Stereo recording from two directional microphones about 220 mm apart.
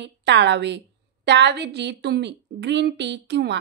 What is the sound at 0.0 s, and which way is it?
A woman's voice, 55° right (ahead or behind).